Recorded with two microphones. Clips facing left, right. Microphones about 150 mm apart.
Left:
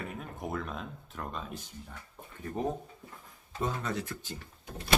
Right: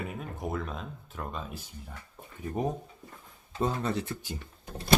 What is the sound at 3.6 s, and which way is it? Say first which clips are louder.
Speech: right 4 dB; 30° right (ahead or behind).